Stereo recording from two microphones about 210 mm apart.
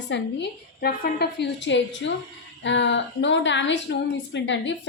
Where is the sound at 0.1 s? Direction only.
55° left (ahead or behind).